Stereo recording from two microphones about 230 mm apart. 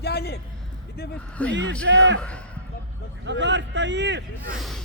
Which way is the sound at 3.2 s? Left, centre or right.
Right.